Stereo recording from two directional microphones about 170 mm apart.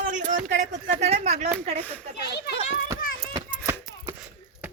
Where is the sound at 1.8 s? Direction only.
10° left (ahead or behind).